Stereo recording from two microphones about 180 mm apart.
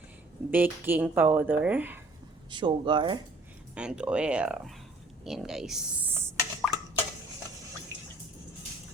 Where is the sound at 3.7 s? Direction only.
5° right (ahead or behind).